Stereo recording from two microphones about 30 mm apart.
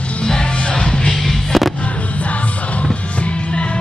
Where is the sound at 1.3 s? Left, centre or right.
Centre.